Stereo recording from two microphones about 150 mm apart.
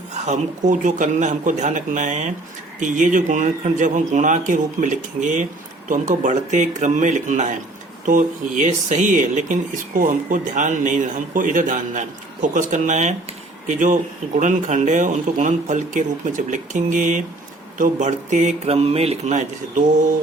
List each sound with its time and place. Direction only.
0.1 s speech: 55° right (ahead or behind)